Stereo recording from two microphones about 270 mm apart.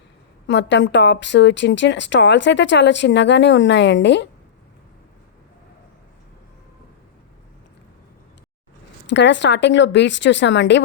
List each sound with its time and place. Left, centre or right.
0.4 s a woman's voice: left
9.0 s a woman's voice: left